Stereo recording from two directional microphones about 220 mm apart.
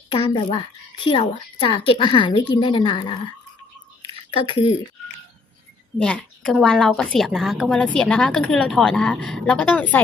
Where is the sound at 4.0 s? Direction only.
20° left (ahead or behind).